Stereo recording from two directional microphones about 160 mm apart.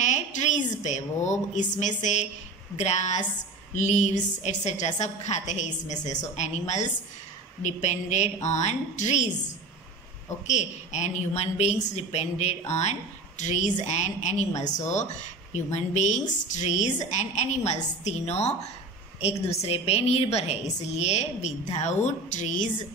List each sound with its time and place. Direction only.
0.0 s a woman's voice: 45° left (ahead or behind)
10.4 s a woman's voice: 45° left (ahead or behind)